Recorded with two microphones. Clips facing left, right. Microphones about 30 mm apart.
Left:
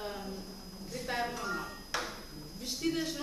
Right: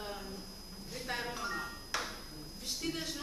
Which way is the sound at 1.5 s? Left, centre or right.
Centre.